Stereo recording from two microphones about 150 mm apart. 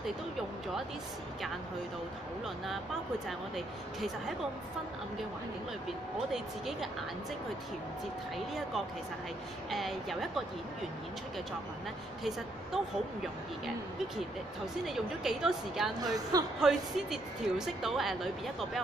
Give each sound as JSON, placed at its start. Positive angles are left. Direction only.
{"t": 2.4, "sound": "a woman's voice", "side_deg": 0}
{"t": 6.3, "sound": "a woman's voice", "side_deg": 0}
{"t": 9.7, "sound": "a woman's voice", "side_deg": 0}
{"t": 12.2, "sound": "a woman's voice", "side_deg": 0}
{"t": 14.9, "sound": "a woman's voice", "side_deg": 0}
{"t": 16.0, "sound": "speech", "side_deg": -25}
{"t": 16.5, "sound": "a woman's voice", "side_deg": -5}